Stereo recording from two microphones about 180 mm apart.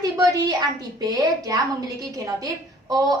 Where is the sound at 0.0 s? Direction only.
20° right (ahead or behind).